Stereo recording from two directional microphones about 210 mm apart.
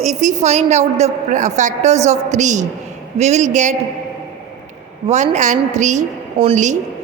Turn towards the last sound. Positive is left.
turn(degrees=-35)  # may be behind; listen again after turning